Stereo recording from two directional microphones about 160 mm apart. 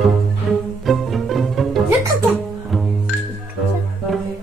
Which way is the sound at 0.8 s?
Centre (ahead or behind).